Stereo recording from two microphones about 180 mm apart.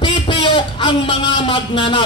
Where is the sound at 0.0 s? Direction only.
30° left (ahead or behind).